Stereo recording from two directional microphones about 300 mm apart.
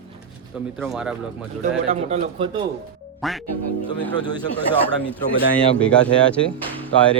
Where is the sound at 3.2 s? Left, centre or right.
Centre.